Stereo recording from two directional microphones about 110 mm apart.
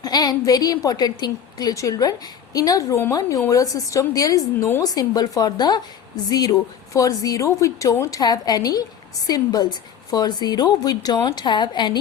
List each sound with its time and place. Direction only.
0.0 s a woman's voice: 35° left (ahead or behind)